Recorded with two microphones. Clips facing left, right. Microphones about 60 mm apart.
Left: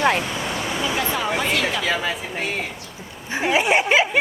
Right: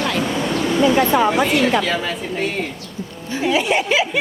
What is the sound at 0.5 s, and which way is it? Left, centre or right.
Air conditioning, centre.